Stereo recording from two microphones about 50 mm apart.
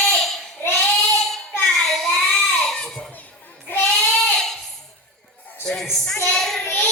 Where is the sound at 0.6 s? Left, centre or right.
Left.